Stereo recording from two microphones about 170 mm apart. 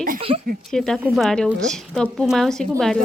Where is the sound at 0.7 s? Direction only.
5° left (ahead or behind).